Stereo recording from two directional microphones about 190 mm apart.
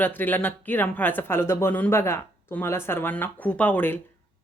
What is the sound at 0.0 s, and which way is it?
Speech, 10° left (ahead or behind).